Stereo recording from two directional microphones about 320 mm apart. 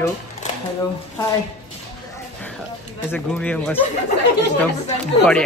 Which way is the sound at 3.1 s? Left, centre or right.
Centre.